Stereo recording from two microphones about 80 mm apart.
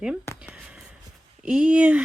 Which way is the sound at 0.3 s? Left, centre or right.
Centre.